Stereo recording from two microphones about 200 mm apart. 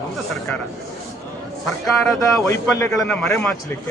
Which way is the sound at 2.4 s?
15° left (ahead or behind).